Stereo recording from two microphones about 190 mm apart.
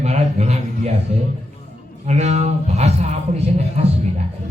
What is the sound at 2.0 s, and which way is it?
A man's voice, 35° right (ahead or behind).